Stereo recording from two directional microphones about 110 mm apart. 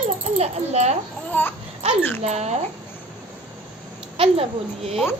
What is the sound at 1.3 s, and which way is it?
Speech, 15° left (ahead or behind).